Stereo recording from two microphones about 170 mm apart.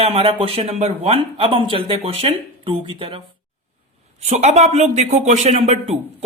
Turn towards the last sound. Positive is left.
turn(degrees=-40)  # may be behind; listen again after turning